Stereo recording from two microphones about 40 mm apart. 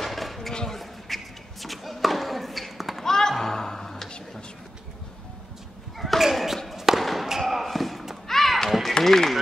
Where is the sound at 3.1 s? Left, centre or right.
Centre.